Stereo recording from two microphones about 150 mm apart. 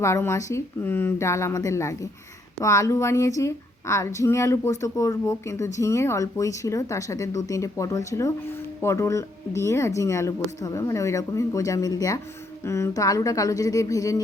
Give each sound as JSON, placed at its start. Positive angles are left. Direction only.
{"t": 0.0, "sound": "speech", "side_deg": 20}